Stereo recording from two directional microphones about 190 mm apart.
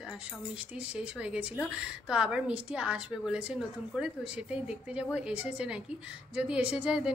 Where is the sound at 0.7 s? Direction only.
5° right (ahead or behind).